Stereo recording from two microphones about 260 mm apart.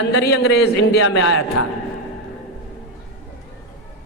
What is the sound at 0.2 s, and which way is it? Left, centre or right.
Speech, left.